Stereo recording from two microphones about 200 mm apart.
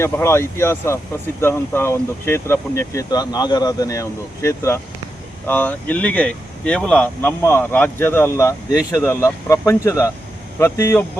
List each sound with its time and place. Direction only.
0.0 s speech: 15° left (ahead or behind)